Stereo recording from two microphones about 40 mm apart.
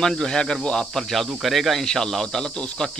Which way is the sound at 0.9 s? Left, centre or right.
Centre.